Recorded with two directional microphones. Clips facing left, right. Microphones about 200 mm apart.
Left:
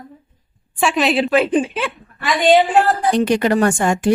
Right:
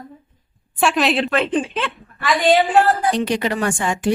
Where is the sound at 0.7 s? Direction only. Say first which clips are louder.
Left 1 dB; centre (ahead or behind).